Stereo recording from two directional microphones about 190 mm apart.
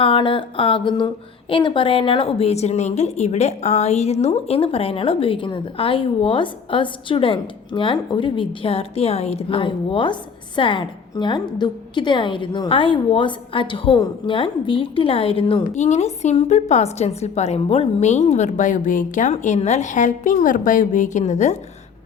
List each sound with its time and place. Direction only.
0.0 s a woman's voice: 30° left (ahead or behind)